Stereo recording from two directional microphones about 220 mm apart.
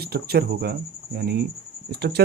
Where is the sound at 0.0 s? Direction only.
45° right (ahead or behind).